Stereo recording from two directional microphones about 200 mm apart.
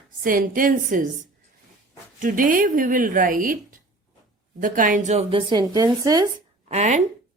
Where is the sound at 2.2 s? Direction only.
45° right (ahead or behind).